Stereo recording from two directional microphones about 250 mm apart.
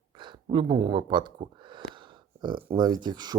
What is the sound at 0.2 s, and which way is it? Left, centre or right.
Speech, centre.